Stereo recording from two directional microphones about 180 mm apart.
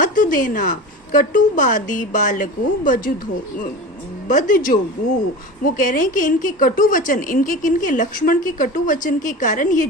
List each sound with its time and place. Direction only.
0.0 s a woman's voice: 50° left (ahead or behind)
4.3 s a woman's voice: 45° left (ahead or behind)